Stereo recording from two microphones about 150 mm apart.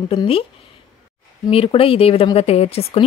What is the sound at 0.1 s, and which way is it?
Speech, 40° left (ahead or behind).